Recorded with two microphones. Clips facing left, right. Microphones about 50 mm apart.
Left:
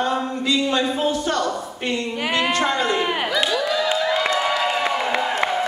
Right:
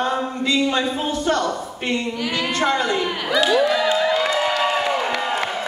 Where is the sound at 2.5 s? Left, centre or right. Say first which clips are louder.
Even; centre.